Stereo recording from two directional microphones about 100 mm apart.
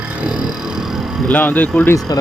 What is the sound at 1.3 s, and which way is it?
Speech, 20° left (ahead or behind).